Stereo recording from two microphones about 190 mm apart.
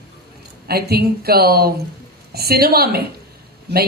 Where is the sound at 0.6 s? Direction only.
55° right (ahead or behind).